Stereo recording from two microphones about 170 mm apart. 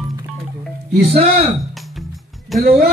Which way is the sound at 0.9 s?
35° right (ahead or behind).